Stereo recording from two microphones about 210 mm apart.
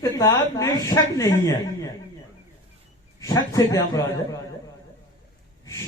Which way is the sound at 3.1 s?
15° left (ahead or behind).